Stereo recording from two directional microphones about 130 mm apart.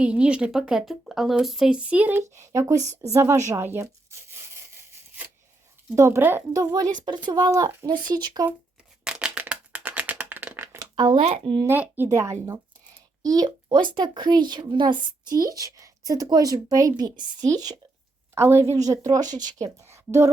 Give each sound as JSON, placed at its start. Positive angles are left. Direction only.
{"t": 0.0, "sound": "a woman's voice", "side_deg": -10}
{"t": 2.8, "sound": "a woman's voice", "side_deg": -60}
{"t": 3.1, "sound": "a woman's voice", "side_deg": -20}
{"t": 6.0, "sound": "a woman's voice", "side_deg": -20}
{"t": 9.0, "sound": "a sound", "side_deg": -10}
{"t": 10.8, "sound": "a sound", "side_deg": -35}
{"t": 11.2, "sound": "speech", "side_deg": -50}
{"t": 11.7, "sound": "a woman's voice", "side_deg": -15}
{"t": 18.3, "sound": "a woman's voice", "side_deg": -20}